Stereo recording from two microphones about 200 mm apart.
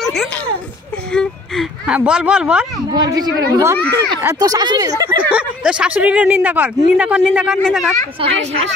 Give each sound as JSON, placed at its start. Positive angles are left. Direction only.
{"t": 0.0, "sound": "a sound", "side_deg": 0}
{"t": 2.9, "sound": "speech", "side_deg": -20}
{"t": 5.3, "sound": "speech", "side_deg": -5}
{"t": 8.2, "sound": "speech", "side_deg": -30}